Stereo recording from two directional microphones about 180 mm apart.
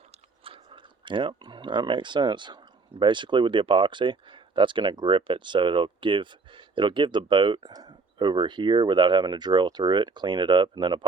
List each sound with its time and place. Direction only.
0.1 s speech: 30° right (ahead or behind)